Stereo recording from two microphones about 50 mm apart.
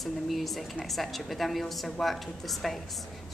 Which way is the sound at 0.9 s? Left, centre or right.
Centre.